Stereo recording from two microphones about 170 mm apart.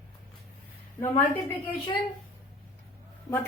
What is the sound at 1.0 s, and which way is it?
Speech, 15° left (ahead or behind).